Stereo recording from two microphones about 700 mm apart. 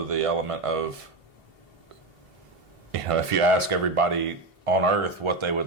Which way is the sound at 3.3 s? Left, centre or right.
Right.